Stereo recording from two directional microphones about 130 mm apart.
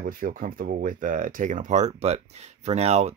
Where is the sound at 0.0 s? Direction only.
90° right.